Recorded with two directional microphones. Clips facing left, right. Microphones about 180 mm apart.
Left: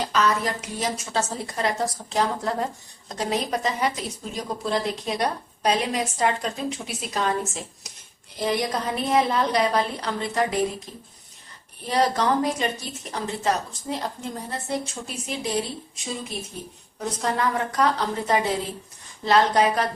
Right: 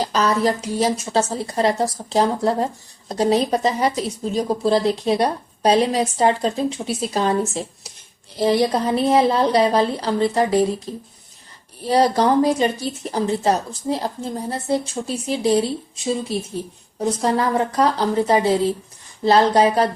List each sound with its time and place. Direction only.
0.1 s a woman's voice: 35° right (ahead or behind)